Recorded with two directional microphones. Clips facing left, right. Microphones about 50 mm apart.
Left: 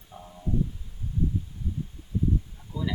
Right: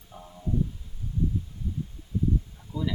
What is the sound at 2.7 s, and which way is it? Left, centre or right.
Speech, centre.